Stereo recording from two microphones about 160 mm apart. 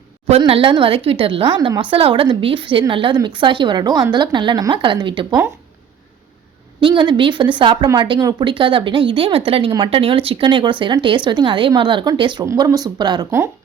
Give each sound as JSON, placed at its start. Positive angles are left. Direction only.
{"t": 0.3, "sound": "a woman's voice", "side_deg": -35}
{"t": 6.7, "sound": "a woman's voice", "side_deg": -30}